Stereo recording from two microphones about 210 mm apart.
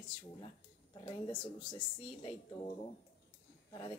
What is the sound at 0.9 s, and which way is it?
Speech, 20° left (ahead or behind).